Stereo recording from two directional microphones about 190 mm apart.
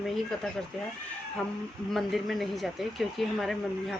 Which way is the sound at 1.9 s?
Centre (ahead or behind).